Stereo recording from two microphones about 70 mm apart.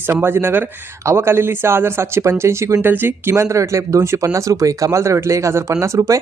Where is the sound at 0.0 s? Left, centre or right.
Right.